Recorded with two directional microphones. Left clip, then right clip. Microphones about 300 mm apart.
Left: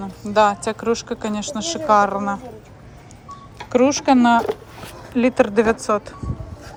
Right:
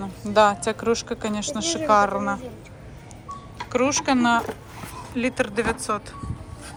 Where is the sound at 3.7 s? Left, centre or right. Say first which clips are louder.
Left 6 dB; centre.